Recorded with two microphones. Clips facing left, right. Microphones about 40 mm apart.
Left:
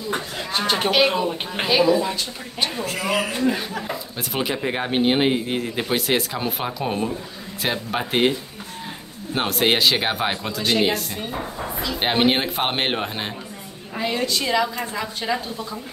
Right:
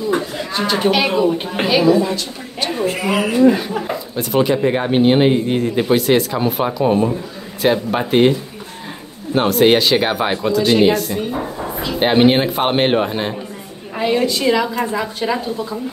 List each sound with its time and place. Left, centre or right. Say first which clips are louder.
0.5 s speech: right 1 dB; left
0.9 s speech: right 4 dB; centre
2.8 s speech: right 7 dB; centre
3.4 s a woman's voice: right 9 dB; centre